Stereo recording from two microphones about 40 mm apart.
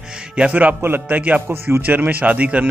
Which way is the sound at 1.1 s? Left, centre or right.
Right.